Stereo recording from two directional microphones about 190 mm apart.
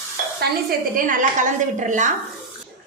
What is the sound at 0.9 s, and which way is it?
Speech, 45° right (ahead or behind).